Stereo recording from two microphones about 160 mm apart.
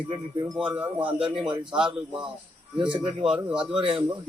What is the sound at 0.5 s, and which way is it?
Speech, 5° right (ahead or behind).